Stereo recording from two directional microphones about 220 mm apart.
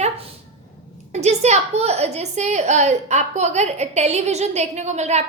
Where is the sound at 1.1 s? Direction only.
30° right (ahead or behind).